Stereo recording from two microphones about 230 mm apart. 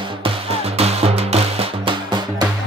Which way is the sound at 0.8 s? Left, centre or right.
Right.